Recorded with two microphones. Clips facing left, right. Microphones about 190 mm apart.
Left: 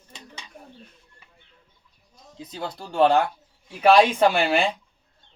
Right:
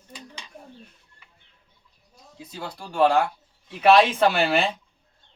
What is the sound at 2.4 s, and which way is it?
Speech, 20° left (ahead or behind).